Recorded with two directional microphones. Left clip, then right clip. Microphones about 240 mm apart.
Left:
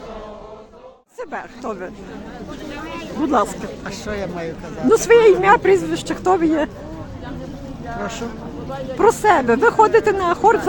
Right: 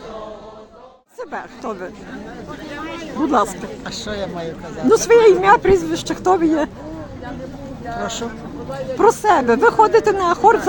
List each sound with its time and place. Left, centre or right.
1.2 s speech: centre
3.3 s speech: centre
8.0 s speech: centre